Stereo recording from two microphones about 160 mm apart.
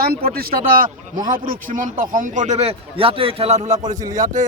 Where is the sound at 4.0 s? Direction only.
25° right (ahead or behind).